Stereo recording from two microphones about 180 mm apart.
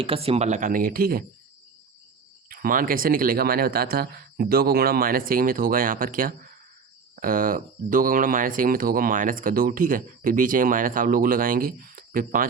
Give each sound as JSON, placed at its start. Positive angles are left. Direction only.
{"t": 0.0, "sound": "speech", "side_deg": -30}
{"t": 2.5, "sound": "speech", "side_deg": -50}